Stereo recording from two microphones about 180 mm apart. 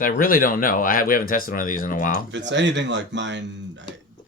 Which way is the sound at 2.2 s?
85° right.